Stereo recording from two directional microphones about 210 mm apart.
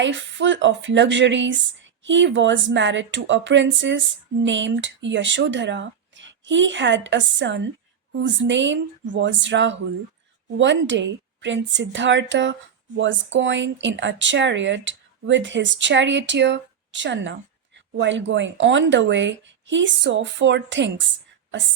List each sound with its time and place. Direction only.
0.0 s speech: 60° right (ahead or behind)